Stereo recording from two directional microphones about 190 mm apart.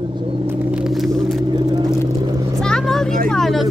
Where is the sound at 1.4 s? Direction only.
25° right (ahead or behind).